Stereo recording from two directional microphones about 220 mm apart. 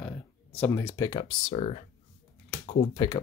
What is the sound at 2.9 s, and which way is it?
Speech, 15° left (ahead or behind).